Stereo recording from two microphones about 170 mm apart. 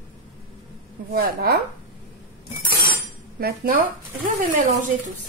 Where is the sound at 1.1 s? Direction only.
60° right (ahead or behind).